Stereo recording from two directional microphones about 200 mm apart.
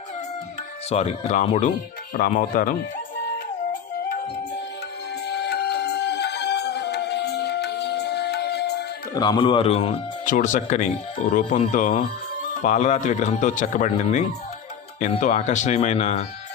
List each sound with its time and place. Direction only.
0.9 s speech: 35° left (ahead or behind)
2.1 s speech: 45° left (ahead or behind)
5.2 s music: 55° left (ahead or behind)
9.1 s speech: 20° left (ahead or behind)